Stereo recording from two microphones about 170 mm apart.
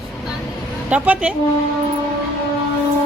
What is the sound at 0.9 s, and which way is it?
Speech, 10° right (ahead or behind).